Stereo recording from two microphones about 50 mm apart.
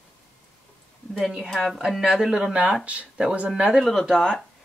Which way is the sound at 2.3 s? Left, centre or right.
Centre.